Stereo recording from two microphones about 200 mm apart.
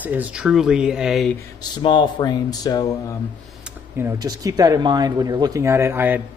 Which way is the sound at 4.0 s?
15° right (ahead or behind).